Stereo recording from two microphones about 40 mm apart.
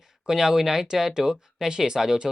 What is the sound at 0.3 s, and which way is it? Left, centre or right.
Speech, centre.